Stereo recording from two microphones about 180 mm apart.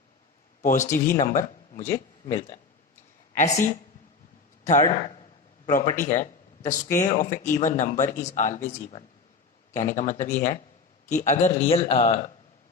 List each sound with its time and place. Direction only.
0.6 s a man's voice: 45° left (ahead or behind)